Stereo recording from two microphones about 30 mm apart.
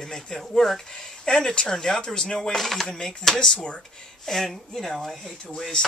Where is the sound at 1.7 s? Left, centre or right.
Centre.